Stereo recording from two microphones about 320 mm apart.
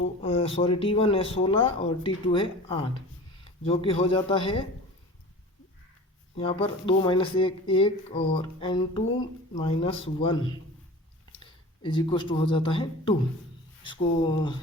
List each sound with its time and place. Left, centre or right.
0.2 s speech: centre
6.3 s speech: centre
11.8 s speech: centre